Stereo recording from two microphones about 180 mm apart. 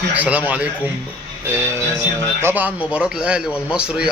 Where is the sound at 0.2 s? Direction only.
10° right (ahead or behind).